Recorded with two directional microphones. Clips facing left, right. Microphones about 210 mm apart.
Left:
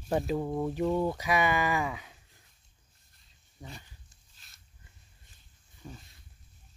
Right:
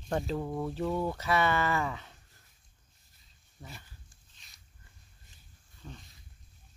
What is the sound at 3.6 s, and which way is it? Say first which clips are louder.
Speech: left 2 dB; 15° left (ahead or behind).